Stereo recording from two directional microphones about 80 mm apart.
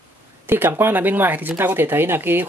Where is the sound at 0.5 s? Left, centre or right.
Right.